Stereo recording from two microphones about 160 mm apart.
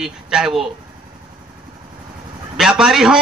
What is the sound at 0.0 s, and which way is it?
Speech, 5° right (ahead or behind).